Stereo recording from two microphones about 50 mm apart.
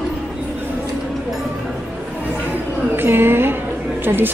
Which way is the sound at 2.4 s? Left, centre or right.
Right.